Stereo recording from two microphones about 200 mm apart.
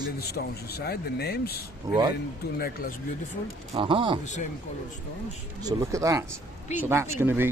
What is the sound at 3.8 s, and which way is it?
Speech, 25° right (ahead or behind).